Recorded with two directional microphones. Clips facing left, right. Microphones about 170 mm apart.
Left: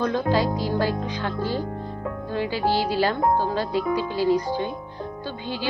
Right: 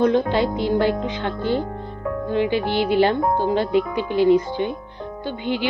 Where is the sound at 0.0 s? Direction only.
25° right (ahead or behind).